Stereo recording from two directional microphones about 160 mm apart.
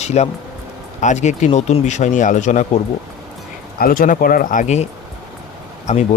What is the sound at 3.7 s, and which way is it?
Speech, 65° left (ahead or behind).